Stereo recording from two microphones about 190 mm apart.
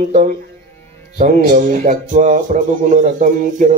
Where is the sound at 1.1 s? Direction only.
45° right (ahead or behind).